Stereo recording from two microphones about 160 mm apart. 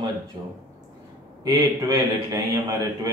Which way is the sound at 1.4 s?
20° right (ahead or behind).